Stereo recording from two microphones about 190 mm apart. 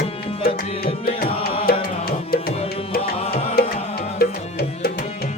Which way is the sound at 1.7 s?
55° left (ahead or behind).